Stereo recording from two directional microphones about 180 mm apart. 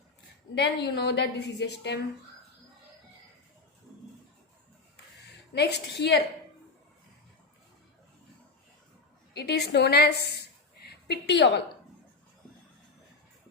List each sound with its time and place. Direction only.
0.5 s a woman's voice: 65° left (ahead or behind)
5.5 s a woman's voice: 65° left (ahead or behind)
9.3 s a woman's voice: 65° left (ahead or behind)